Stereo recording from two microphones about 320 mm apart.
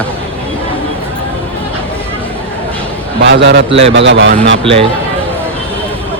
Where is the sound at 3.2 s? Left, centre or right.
Right.